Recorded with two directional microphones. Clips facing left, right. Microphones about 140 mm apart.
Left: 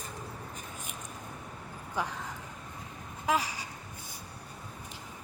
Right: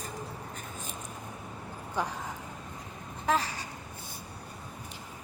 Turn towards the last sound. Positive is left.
turn(degrees=10)  # may be behind; listen again after turning